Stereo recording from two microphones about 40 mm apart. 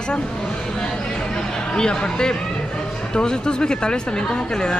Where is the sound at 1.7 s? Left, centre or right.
Left.